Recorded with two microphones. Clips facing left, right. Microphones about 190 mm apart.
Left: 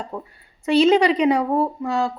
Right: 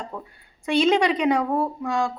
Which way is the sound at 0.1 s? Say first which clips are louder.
Left 4 dB; 25° left (ahead or behind).